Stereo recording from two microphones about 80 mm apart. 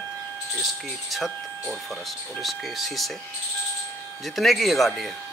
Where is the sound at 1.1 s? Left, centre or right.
Centre.